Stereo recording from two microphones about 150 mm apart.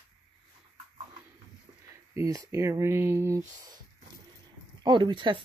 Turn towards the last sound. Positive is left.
turn(degrees=-30)  # may be behind; listen again after turning